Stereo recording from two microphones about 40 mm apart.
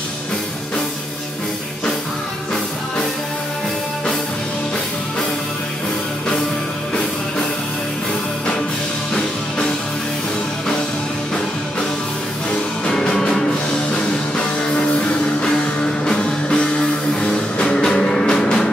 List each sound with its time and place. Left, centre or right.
12.8 s music: left
15.4 s music: centre